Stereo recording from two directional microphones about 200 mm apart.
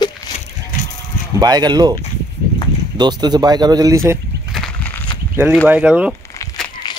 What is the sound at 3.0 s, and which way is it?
Speech, 20° right (ahead or behind).